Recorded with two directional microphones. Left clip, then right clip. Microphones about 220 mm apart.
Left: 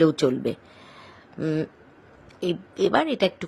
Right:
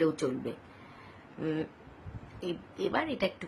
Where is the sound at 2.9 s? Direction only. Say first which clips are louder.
Left 9 dB; 35° left (ahead or behind).